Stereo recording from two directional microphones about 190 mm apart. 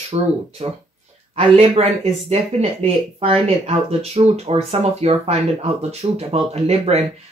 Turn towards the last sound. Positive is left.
turn(degrees=-35)  # may be behind; listen again after turning